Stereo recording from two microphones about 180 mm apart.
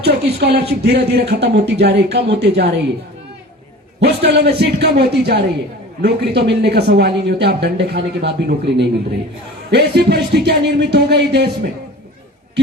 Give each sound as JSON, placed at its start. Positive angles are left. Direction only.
{"t": 0.0, "sound": "speech", "side_deg": -65}
{"t": 4.0, "sound": "a man's voice", "side_deg": -65}